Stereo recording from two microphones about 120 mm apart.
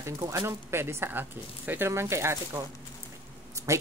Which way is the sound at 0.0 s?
25° right (ahead or behind).